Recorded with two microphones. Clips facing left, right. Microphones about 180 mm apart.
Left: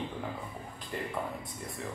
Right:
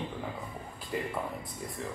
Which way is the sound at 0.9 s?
5° right (ahead or behind).